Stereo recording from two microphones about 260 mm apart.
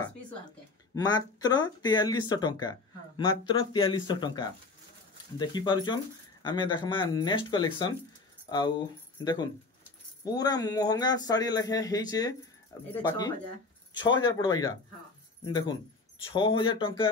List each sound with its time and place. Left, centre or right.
0.9 s a man's voice: centre
14.0 s a man's voice: centre